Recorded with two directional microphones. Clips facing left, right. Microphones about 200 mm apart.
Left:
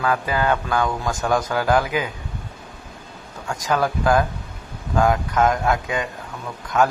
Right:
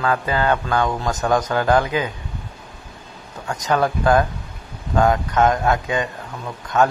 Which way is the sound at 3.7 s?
Centre (ahead or behind).